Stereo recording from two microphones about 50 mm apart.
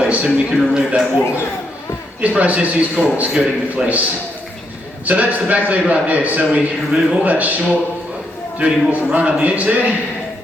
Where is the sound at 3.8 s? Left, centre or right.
Centre.